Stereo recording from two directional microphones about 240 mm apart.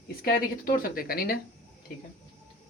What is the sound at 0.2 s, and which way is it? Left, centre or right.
Speech, left.